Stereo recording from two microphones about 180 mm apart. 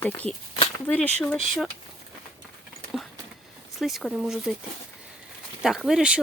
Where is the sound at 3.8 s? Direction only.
Centre (ahead or behind).